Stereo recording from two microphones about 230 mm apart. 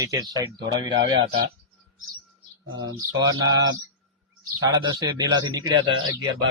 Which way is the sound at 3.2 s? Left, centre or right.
Centre.